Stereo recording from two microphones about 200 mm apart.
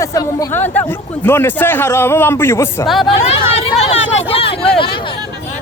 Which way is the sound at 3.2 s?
35° left (ahead or behind).